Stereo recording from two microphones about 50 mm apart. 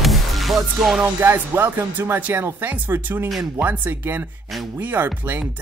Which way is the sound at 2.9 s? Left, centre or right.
Right.